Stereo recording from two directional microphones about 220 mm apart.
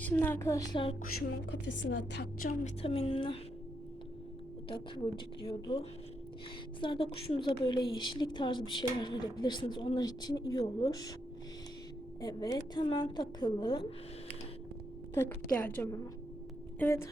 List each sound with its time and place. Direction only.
0.0 s a woman's voice: 10° left (ahead or behind)
1.2 s a woman's voice: 45° left (ahead or behind)
2.5 s a woman's voice: 30° left (ahead or behind)
4.7 s a woman's voice: 20° left (ahead or behind)
12.2 s a woman's voice: 20° left (ahead or behind)
15.1 s a woman's voice: 10° left (ahead or behind)